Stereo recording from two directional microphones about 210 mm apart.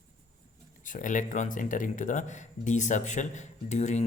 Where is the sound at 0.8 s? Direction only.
40° left (ahead or behind).